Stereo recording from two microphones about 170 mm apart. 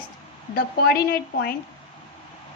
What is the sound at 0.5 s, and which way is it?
A woman's voice, 65° left (ahead or behind).